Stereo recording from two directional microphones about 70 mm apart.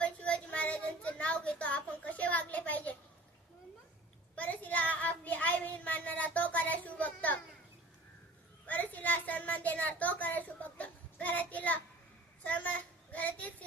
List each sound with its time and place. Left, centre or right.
0.0 s child singing: centre
4.4 s child singing: left
8.6 s child singing: left